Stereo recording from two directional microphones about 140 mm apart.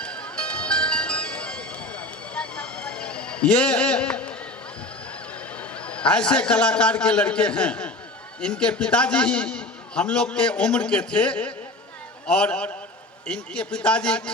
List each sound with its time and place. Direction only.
0.0 s music: 5° left (ahead or behind)
5.5 s a man's voice: 10° left (ahead or behind)